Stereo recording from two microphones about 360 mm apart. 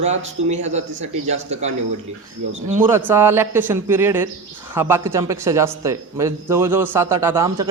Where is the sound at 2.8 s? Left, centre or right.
Centre.